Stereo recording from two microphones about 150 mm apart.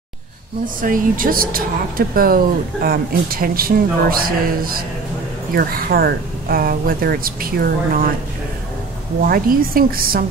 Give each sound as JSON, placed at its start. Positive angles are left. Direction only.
{"t": 0.7, "sound": "speech", "side_deg": -65}
{"t": 9.2, "sound": "speech", "side_deg": -75}